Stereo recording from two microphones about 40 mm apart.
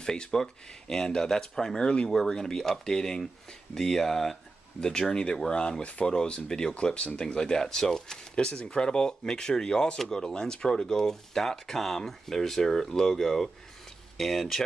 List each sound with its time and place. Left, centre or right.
0.0 s speech: centre
2.0 s speech: centre